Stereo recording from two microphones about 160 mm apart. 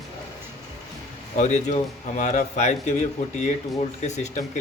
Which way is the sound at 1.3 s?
50° left (ahead or behind).